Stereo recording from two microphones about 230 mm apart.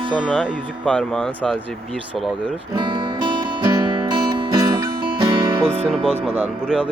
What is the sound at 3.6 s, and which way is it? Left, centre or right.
Music, centre.